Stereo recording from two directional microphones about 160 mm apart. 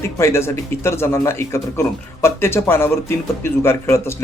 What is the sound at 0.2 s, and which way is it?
Speech, 15° left (ahead or behind).